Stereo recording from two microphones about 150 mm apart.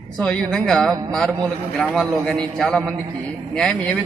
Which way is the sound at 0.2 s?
5° left (ahead or behind).